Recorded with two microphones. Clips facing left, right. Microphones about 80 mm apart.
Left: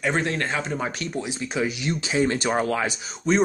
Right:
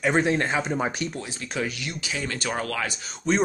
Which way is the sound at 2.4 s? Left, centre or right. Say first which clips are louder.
Left 5 dB; centre.